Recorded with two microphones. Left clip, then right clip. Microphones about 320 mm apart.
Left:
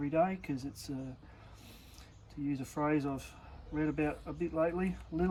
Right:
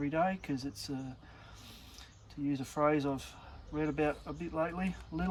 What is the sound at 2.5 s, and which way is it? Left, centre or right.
Speech, centre.